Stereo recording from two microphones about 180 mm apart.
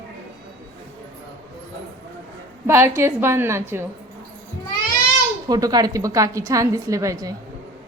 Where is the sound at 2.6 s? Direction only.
15° right (ahead or behind).